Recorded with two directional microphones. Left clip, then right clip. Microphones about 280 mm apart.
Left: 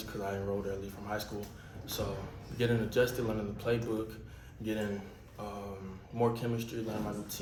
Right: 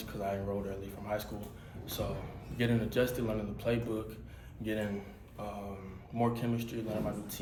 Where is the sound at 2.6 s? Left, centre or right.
Centre.